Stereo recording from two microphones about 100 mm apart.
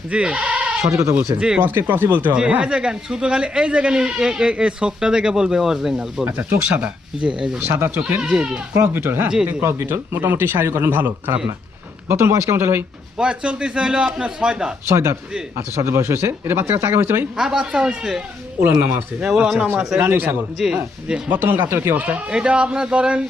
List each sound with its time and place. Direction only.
0.1 s bleat: 10° right (ahead or behind)
0.9 s speech: 30° right (ahead or behind)
1.4 s speech: 10° right (ahead or behind)
6.2 s speech: 20° right (ahead or behind)
7.8 s speech: 20° right (ahead or behind)
8.2 s speech: 10° right (ahead or behind)
8.7 s speech: 25° right (ahead or behind)
9.3 s speech: 10° right (ahead or behind)
9.6 s speech: 25° right (ahead or behind)
13.1 s speech: 10° right (ahead or behind)
14.8 s speech: 25° right (ahead or behind)
17.3 s a man's voice: 5° right (ahead or behind)
19.2 s speech: 10° right (ahead or behind)
20.6 s speech: 5° right (ahead or behind)